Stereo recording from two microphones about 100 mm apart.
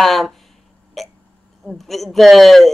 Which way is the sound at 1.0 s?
Centre (ahead or behind).